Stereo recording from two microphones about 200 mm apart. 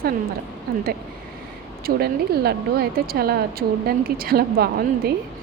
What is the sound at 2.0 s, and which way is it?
A woman's voice, 50° right (ahead or behind).